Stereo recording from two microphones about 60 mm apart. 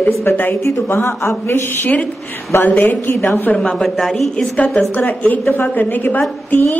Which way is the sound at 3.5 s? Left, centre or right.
Centre.